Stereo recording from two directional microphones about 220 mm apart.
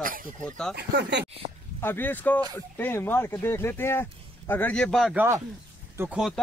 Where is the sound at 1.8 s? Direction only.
10° left (ahead or behind).